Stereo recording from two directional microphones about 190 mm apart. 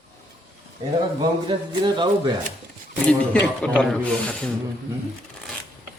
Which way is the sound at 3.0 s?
5° left (ahead or behind).